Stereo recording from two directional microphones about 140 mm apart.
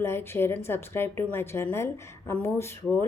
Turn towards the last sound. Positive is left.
turn(degrees=15)  # may be behind; listen again after turning